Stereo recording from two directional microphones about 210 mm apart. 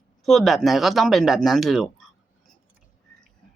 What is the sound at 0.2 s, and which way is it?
Speech, centre (ahead or behind).